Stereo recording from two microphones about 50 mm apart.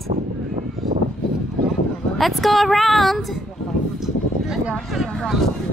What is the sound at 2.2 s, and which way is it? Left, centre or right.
A woman's voice, centre.